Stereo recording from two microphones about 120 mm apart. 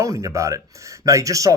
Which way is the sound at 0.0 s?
25° right (ahead or behind).